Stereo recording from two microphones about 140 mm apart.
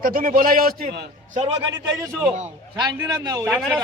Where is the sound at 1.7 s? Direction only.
20° right (ahead or behind).